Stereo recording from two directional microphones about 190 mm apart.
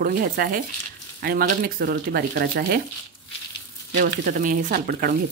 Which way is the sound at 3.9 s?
45° right (ahead or behind).